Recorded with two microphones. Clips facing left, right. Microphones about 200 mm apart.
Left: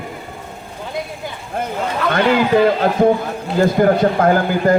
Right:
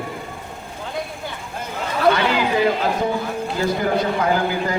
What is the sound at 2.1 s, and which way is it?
A man's voice, 50° left (ahead or behind).